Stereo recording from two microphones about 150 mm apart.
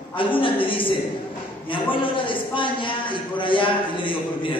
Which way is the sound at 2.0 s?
35° left (ahead or behind).